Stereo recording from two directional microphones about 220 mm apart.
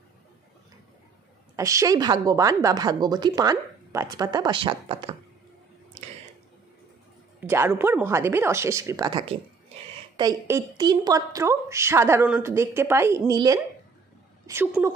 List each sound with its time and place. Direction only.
1.6 s a woman's voice: 15° right (ahead or behind)
7.3 s a woman's voice: 10° right (ahead or behind)